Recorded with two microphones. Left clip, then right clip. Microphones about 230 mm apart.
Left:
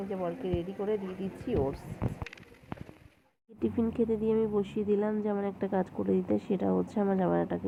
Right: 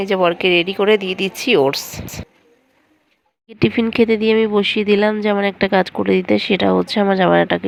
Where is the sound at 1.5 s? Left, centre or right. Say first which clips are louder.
Right 16 dB; right.